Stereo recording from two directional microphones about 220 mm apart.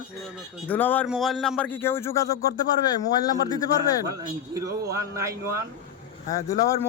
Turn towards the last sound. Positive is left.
turn(degrees=15)  # may be behind; listen again after turning